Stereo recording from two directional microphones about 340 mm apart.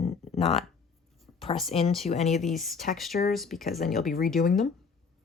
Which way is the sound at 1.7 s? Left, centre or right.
Centre.